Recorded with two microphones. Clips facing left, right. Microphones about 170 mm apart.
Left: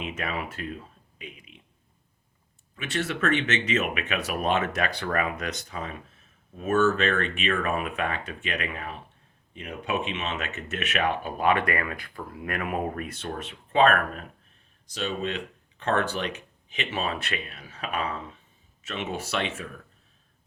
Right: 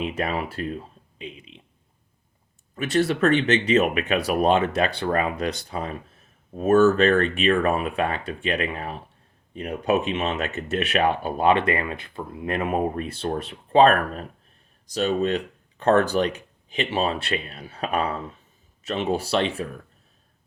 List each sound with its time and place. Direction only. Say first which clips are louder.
0.0 s speech: right 6 dB; 35° right (ahead or behind)
1.2 s a sound: right 6 dB; 30° right (ahead or behind)
2.7 s speech: right 8 dB; 40° right (ahead or behind)